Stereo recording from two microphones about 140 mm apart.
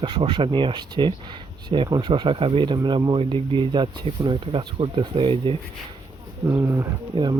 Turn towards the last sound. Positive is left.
turn(degrees=-35)  # may be behind; listen again after turning